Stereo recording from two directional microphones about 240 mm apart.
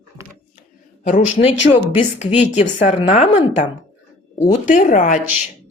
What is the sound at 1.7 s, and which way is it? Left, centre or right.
A woman's voice, left.